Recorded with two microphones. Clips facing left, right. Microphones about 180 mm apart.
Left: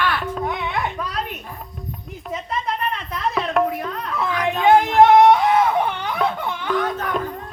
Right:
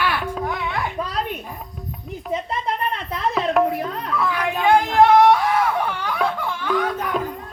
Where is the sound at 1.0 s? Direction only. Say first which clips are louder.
Right 2 dB; 30° right (ahead or behind).